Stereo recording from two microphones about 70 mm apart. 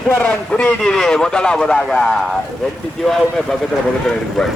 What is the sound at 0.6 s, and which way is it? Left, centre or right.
Speech, centre.